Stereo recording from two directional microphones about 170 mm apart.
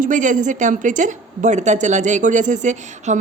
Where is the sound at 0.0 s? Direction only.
45° right (ahead or behind).